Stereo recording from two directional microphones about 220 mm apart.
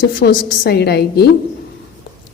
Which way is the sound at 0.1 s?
45° left (ahead or behind).